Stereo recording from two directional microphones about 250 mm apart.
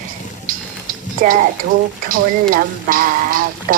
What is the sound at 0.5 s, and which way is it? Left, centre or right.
Music, right.